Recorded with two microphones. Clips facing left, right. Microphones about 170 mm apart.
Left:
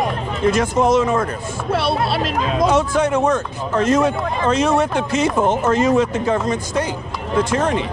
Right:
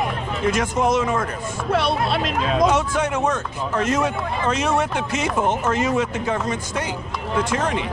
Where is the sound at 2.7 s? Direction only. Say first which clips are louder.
Left 5 dB; 30° left (ahead or behind).